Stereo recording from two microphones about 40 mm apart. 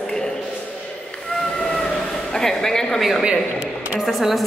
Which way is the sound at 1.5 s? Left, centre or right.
Centre.